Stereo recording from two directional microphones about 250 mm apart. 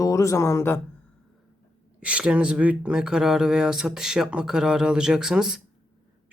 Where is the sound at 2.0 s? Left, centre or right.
Centre.